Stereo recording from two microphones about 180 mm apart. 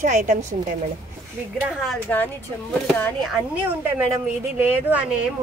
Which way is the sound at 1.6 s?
Centre (ahead or behind).